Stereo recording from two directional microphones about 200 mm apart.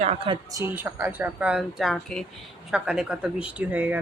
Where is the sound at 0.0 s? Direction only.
30° right (ahead or behind).